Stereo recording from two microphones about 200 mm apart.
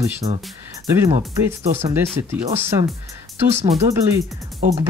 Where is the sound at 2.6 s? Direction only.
15° right (ahead or behind).